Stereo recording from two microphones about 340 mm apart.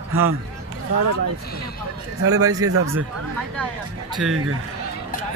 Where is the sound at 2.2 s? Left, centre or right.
Right.